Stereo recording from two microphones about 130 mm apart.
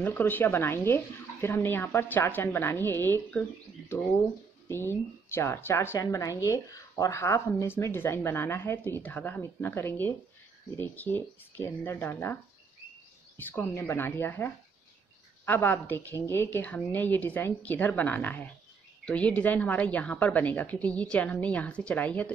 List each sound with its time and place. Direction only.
0.0 s speech: 15° left (ahead or behind)
4.6 s a woman's voice: 20° left (ahead or behind)
13.4 s speech: 15° left (ahead or behind)